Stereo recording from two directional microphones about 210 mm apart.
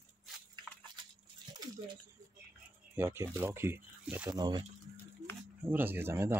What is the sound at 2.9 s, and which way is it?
Speech, 10° right (ahead or behind).